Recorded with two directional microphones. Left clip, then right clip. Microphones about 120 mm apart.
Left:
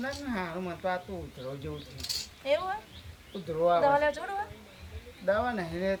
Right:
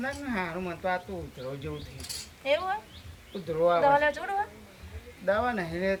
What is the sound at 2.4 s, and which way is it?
Speech, centre (ahead or behind).